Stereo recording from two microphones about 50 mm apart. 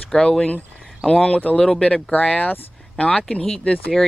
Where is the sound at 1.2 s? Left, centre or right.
Left.